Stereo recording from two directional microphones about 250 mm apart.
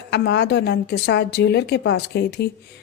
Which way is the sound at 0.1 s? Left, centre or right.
Left.